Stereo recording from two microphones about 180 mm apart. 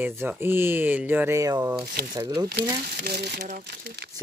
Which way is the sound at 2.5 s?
65° right (ahead or behind).